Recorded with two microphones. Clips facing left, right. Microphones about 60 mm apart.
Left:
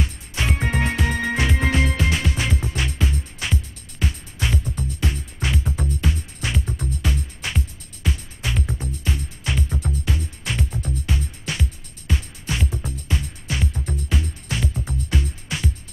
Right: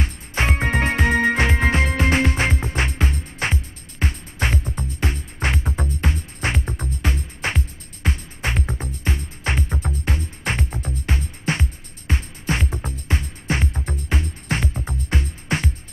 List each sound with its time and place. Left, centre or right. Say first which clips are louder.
0.0 s music: right 3 dB; right
14.7 s music: even; right
15.0 s music: right 2 dB; right